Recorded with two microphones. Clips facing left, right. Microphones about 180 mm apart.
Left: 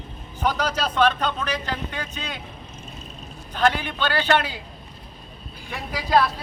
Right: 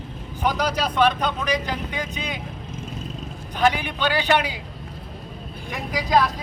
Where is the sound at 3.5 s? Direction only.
15° right (ahead or behind).